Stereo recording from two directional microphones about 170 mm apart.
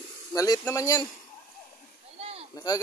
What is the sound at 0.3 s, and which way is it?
Speech, 20° left (ahead or behind).